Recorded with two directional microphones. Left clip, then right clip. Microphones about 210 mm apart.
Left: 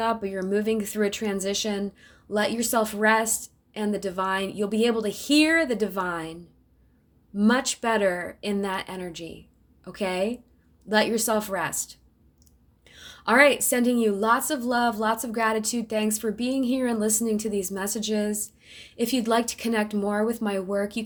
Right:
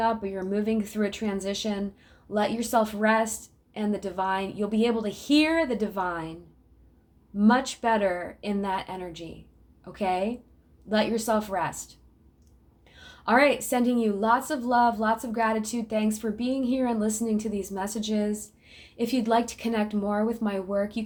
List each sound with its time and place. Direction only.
0.0 s a woman's voice: 30° left (ahead or behind)
7.3 s a woman's voice: 30° left (ahead or behind)